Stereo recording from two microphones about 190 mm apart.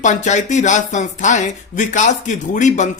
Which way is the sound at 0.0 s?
40° left (ahead or behind).